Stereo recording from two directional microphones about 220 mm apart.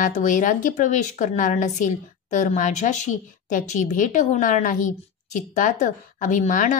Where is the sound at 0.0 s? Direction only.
35° left (ahead or behind).